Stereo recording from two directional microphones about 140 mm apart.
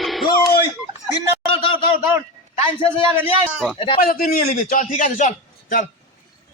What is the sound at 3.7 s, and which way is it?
Speech, 40° left (ahead or behind).